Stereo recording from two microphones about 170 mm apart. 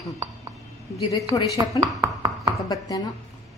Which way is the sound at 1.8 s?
20° right (ahead or behind).